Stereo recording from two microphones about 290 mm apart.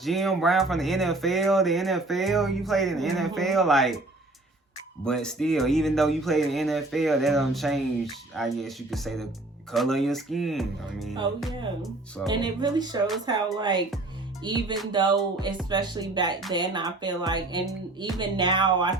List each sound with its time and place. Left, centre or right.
0.0 s speech: centre
5.0 s speech: centre
12.3 s speech: centre